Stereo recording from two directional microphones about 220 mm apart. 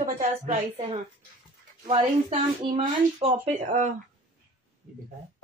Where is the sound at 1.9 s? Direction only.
25° right (ahead or behind).